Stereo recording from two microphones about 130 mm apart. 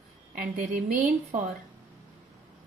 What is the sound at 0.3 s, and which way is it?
Speech, 90° right.